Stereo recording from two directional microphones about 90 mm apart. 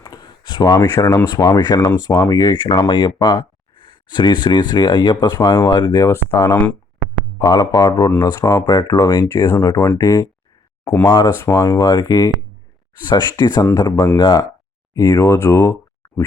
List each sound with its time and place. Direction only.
0.0 s a sound: 45° left (ahead or behind)
1.2 s a man's voice: 45° left (ahead or behind)
5.9 s speech: 35° left (ahead or behind)
7.3 s a man's voice: 45° left (ahead or behind)
11.0 s a man's voice: 50° left (ahead or behind)
11.3 s speech: 30° left (ahead or behind)
11.8 s a man's voice: 45° left (ahead or behind)
14.9 s speech: 35° left (ahead or behind)